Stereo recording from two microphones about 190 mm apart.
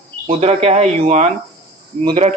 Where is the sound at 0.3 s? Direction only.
30° right (ahead or behind).